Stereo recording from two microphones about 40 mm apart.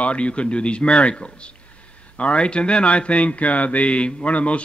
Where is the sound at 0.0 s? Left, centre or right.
Left.